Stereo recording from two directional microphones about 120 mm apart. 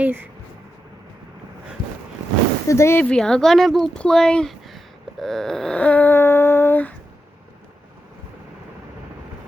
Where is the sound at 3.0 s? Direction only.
5° left (ahead or behind).